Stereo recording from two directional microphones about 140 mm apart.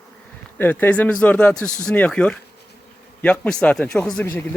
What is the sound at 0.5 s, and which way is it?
Speech, 15° left (ahead or behind).